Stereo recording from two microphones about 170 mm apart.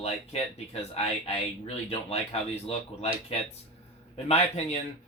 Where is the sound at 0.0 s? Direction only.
35° left (ahead or behind).